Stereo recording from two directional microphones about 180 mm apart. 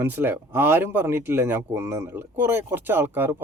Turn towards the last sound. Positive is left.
turn(degrees=-10)  # may be behind; listen again after turning